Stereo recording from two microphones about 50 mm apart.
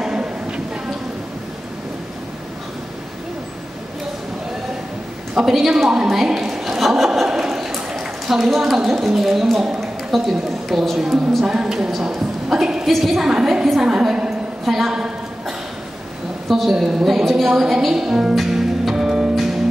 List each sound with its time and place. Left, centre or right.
0.0 s a sound: centre
5.3 s a woman's voice: centre
7.2 s a sound: centre
8.7 s a woman's voice: centre
11.4 s a woman's voice: centre
14.6 s a woman's voice: centre
16.4 s a woman's voice: centre
18.3 s music: centre